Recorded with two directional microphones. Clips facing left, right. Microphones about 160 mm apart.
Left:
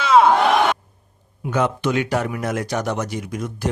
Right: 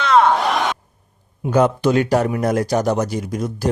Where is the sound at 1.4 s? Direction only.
40° right (ahead or behind).